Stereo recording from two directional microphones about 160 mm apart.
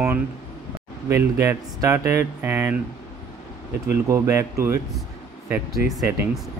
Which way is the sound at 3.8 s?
20° right (ahead or behind).